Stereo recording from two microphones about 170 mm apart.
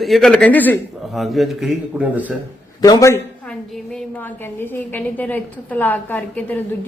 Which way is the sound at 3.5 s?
5° left (ahead or behind).